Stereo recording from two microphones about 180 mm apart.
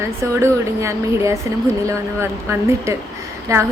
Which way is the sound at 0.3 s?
15° right (ahead or behind).